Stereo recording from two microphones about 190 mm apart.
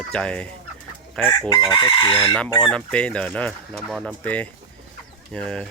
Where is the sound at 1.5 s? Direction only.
20° left (ahead or behind).